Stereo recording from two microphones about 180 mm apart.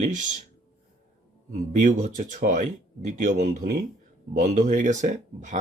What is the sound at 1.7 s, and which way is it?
Speech, 45° right (ahead or behind).